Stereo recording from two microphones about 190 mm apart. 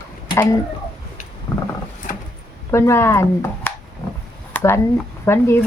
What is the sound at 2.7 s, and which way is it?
Speech, 15° left (ahead or behind).